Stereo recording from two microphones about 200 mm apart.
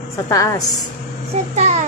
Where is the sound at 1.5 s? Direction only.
35° right (ahead or behind).